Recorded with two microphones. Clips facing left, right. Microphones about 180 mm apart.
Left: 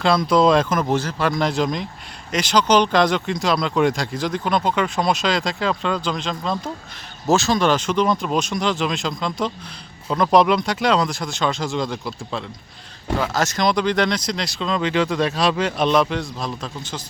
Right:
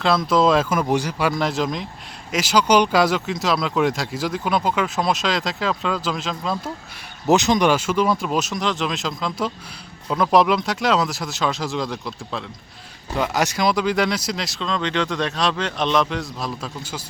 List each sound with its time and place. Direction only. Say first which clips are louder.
0.0 s speech: left 1 dB; centre (ahead or behind)
7.3 s speech: right 1 dB; 20° right (ahead or behind); by 12.5 s centre (ahead or behind)
13.1 s speech: even; 15° right (ahead or behind)